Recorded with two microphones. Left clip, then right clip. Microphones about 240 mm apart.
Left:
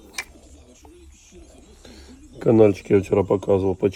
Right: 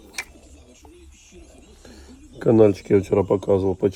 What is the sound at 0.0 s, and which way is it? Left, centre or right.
Tick-tock, centre.